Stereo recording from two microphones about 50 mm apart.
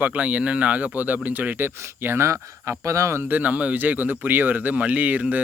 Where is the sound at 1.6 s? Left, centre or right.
Right.